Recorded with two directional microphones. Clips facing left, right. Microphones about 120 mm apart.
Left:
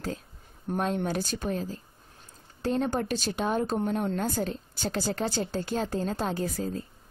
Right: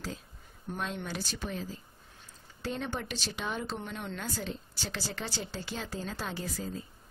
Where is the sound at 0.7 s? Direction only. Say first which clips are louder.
Left 8 dB; 45° left (ahead or behind).